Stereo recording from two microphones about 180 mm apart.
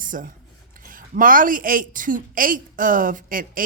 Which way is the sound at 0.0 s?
50° right (ahead or behind).